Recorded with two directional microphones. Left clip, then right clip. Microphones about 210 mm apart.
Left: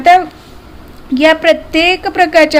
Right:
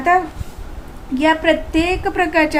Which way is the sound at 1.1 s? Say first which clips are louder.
Left 6 dB; 50° left (ahead or behind).